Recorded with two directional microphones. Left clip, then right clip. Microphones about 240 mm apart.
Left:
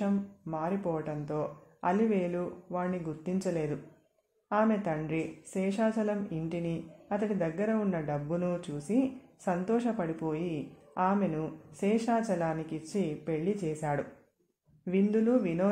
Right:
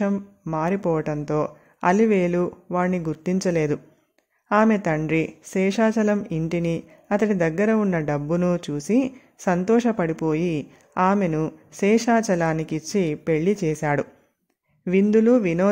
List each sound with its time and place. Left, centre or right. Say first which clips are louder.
0.0 s speech: right 8 dB; right